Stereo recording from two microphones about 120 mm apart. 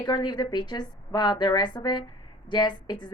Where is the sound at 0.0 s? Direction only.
35° left (ahead or behind).